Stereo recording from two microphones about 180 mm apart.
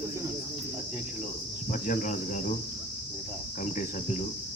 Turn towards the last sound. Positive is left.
turn(degrees=40)  # may be behind; listen again after turning